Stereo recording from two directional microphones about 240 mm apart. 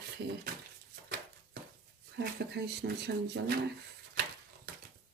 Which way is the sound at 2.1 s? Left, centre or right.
Right.